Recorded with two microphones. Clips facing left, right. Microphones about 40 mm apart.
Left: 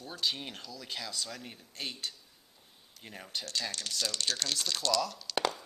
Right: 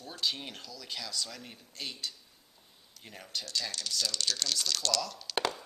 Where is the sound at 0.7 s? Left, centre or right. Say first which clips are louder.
Even; centre.